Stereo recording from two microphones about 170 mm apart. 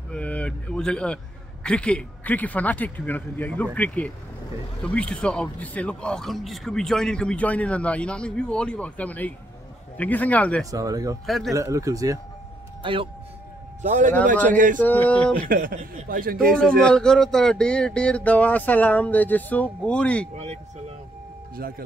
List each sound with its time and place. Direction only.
0.1 s a man's voice: 5° left (ahead or behind)
10.7 s speech: 20° right (ahead or behind)
11.2 s speech: centre (ahead or behind)
11.5 s speech: 20° right (ahead or behind)
12.8 s a man's voice: 30° right (ahead or behind)
13.8 s a man's voice: 45° right (ahead or behind)
14.8 s a man's voice: 10° left (ahead or behind)
15.3 s speech: 55° right (ahead or behind)
16.8 s a man's voice: 5° left (ahead or behind)
21.5 s speech: 60° right (ahead or behind)